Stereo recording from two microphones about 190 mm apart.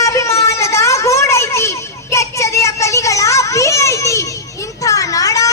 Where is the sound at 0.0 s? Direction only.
15° left (ahead or behind).